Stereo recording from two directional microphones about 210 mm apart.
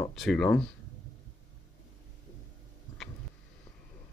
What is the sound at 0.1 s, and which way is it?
Speech, centre (ahead or behind).